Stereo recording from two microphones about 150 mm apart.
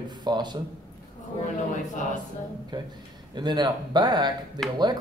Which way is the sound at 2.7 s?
30° right (ahead or behind).